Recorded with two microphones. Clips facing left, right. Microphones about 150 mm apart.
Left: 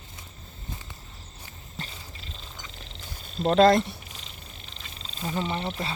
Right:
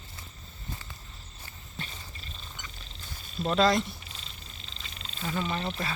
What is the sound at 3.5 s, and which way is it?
Speech, 50° left (ahead or behind).